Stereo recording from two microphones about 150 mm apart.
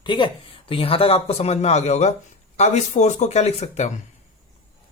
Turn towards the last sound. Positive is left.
turn(degrees=50)  # may be behind; listen again after turning